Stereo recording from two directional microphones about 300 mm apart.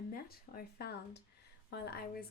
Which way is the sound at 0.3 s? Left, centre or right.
Left.